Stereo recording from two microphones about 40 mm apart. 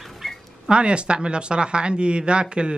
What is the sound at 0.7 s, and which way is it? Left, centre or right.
Speech, right.